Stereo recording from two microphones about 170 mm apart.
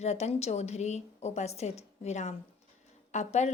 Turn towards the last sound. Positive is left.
turn(degrees=40)  # may be behind; listen again after turning